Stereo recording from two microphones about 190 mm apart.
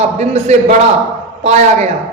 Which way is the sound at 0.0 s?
35° right (ahead or behind).